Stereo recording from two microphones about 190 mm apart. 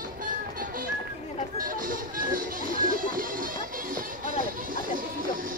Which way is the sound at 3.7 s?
45° right (ahead or behind).